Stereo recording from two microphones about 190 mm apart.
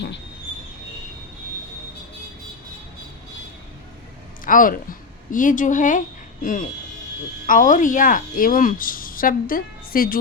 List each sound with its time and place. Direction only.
4.4 s a woman's voice: 45° left (ahead or behind)